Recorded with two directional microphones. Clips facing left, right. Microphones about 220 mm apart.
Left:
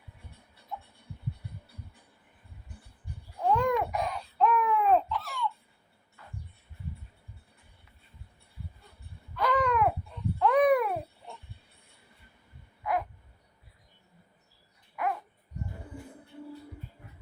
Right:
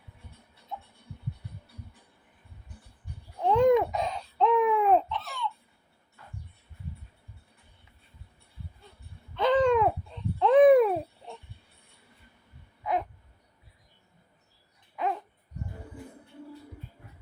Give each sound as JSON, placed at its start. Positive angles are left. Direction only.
{"t": 3.4, "sound": "babbling", "side_deg": -20}
{"t": 9.3, "sound": "babbling", "side_deg": -25}
{"t": 12.8, "sound": "a sound", "side_deg": -20}